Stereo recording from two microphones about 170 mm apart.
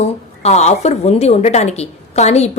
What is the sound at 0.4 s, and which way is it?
A woman's voice, 40° left (ahead or behind).